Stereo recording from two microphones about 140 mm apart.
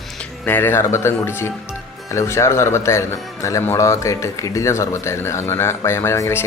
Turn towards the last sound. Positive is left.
turn(degrees=20)  # may be behind; listen again after turning